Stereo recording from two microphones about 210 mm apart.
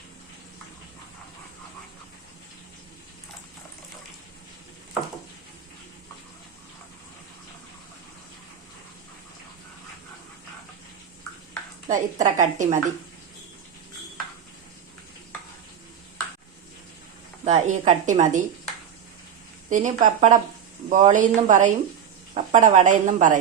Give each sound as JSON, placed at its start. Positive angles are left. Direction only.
{"t": 11.9, "sound": "a woman's voice", "side_deg": -35}
{"t": 17.4, "sound": "a woman's voice", "side_deg": -35}
{"t": 19.7, "sound": "a woman's voice", "side_deg": -35}